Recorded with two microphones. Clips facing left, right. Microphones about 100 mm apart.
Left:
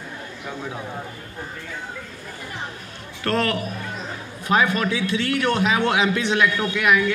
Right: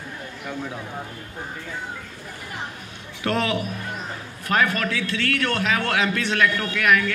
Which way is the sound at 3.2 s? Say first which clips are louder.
Left 1 dB; 10° right (ahead or behind).